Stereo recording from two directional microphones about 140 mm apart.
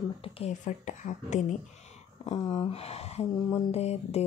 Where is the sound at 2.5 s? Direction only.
45° left (ahead or behind).